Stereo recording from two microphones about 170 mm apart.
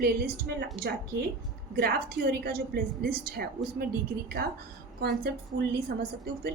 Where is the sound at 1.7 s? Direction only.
65° right (ahead or behind).